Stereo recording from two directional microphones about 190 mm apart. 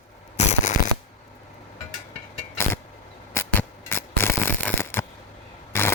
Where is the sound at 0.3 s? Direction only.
35° left (ahead or behind).